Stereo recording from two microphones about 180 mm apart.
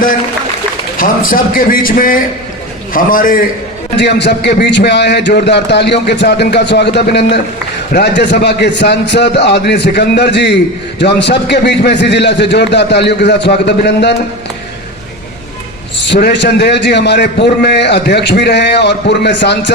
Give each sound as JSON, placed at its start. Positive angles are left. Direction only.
{"t": 0.9, "sound": "speech", "side_deg": 50}
{"t": 3.9, "sound": "a man's voice", "side_deg": 70}
{"t": 16.0, "sound": "a man's voice", "side_deg": 70}